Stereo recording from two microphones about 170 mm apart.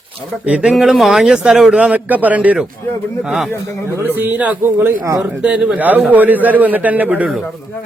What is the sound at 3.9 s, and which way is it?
A man's voice, 15° right (ahead or behind).